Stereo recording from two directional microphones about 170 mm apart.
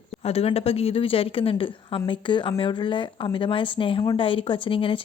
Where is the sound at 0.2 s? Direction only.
35° left (ahead or behind).